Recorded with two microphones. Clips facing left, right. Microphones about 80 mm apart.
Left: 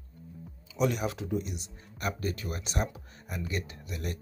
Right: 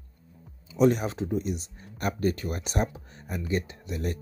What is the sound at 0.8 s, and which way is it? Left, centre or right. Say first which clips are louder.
Speech: right 6 dB; right.